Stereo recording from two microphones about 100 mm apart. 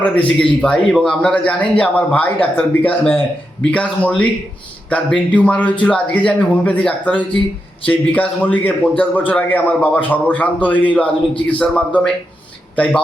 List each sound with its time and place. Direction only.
0.0 s a man's voice: 15° left (ahead or behind)